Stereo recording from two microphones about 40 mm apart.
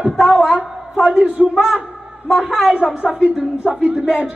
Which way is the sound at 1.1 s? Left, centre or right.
Right.